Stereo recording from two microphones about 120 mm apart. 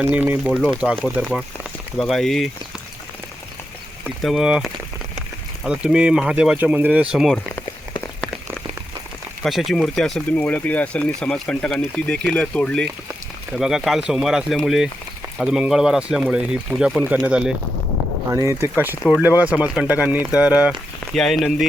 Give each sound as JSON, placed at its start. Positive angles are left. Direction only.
{"t": 0.0, "sound": "speech", "side_deg": -15}
{"t": 2.0, "sound": "speech", "side_deg": 0}
{"t": 4.2, "sound": "speech", "side_deg": 0}
{"t": 9.4, "sound": "speech", "side_deg": 0}
{"t": 13.6, "sound": "speech", "side_deg": -5}
{"t": 18.3, "sound": "speech", "side_deg": -25}
{"t": 19.2, "sound": "speech", "side_deg": -10}
{"t": 21.1, "sound": "speech", "side_deg": 0}